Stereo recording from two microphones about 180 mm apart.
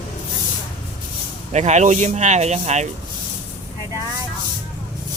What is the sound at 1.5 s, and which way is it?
Speech, 40° right (ahead or behind).